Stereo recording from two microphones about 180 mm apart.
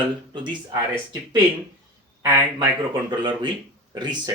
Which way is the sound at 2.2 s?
15° right (ahead or behind).